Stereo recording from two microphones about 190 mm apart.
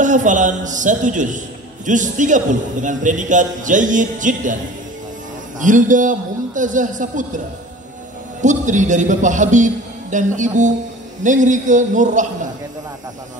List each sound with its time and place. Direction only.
0.0 s a man's voice: 40° right (ahead or behind)
5.6 s a man's voice: 40° right (ahead or behind)
8.4 s a man's voice: 40° right (ahead or behind)